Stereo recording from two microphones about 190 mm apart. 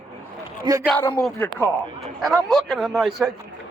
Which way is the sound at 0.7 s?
20° right (ahead or behind).